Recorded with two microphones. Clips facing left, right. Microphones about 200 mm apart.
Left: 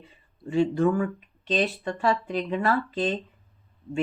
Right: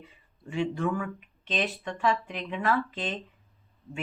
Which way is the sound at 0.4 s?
35° left (ahead or behind).